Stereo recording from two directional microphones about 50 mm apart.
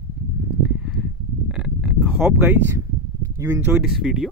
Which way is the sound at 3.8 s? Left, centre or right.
Centre.